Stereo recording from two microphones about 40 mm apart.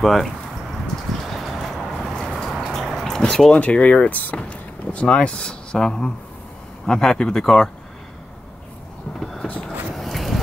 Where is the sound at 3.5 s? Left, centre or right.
Left.